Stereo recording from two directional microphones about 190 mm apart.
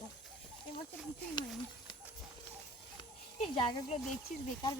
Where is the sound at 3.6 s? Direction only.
25° left (ahead or behind).